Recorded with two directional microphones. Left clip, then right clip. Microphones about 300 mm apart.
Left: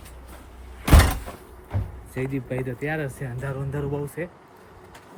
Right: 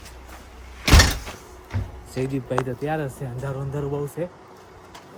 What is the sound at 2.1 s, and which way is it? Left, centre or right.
Speech, centre.